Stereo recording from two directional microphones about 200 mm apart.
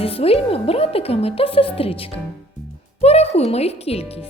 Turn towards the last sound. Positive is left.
turn(degrees=30)  # may be behind; listen again after turning